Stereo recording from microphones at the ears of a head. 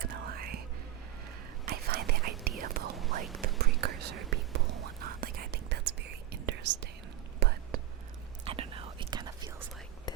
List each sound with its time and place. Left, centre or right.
0.0 s whispering: right
1.6 s whispering: right